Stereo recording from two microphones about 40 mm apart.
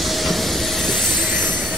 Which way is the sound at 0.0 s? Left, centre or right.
Centre.